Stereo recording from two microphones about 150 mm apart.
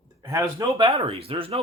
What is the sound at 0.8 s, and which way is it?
Speech, 40° right (ahead or behind).